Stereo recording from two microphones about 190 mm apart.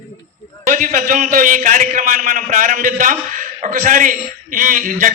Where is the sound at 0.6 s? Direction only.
40° right (ahead or behind).